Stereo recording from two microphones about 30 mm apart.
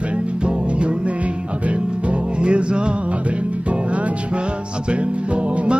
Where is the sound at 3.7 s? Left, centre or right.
Right.